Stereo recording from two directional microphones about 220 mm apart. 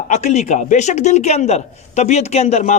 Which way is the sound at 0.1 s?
30° left (ahead or behind).